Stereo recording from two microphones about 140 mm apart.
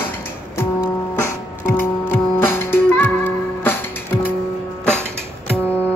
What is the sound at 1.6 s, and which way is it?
Music, 15° left (ahead or behind).